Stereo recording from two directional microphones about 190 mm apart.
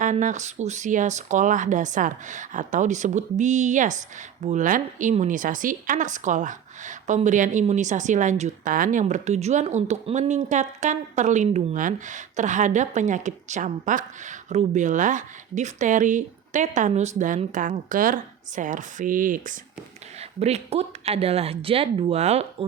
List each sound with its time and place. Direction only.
0.0 s speech: 40° right (ahead or behind)
20.4 s speech: 35° right (ahead or behind)